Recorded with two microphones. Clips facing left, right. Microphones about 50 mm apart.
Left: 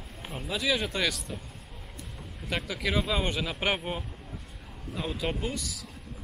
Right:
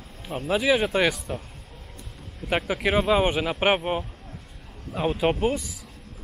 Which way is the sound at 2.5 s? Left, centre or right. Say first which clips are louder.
Right 7 dB; right.